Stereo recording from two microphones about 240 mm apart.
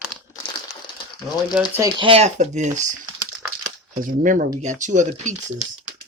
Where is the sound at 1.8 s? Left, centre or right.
Centre.